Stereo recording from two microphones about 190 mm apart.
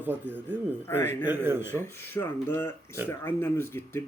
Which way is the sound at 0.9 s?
10° left (ahead or behind).